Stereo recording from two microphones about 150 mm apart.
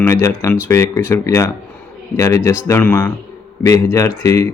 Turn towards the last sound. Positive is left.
turn(degrees=20)  # may be behind; listen again after turning